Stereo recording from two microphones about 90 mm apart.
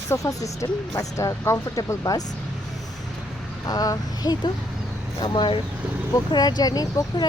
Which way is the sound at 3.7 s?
45° left (ahead or behind).